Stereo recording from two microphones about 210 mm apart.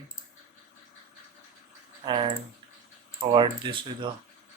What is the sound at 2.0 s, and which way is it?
Speech, 25° right (ahead or behind).